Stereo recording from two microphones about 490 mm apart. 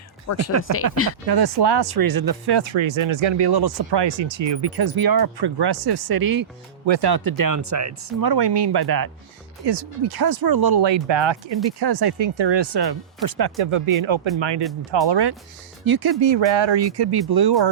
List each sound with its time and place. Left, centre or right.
0.3 s speech: left
1.3 s speech: right
6.8 s speech: right
8.2 s speech: right
13.6 s speech: right
14.3 s speech: right